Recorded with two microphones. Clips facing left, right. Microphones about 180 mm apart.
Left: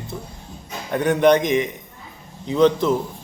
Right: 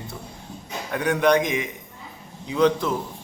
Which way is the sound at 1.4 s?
10° right (ahead or behind).